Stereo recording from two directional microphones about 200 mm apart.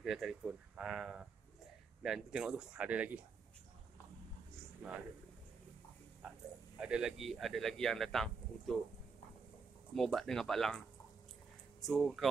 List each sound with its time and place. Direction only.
0.0 s speech: centre (ahead or behind)
6.8 s speech: 5° right (ahead or behind)
9.9 s speech: centre (ahead or behind)
11.8 s speech: centre (ahead or behind)